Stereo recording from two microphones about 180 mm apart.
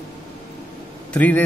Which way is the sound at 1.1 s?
10° left (ahead or behind).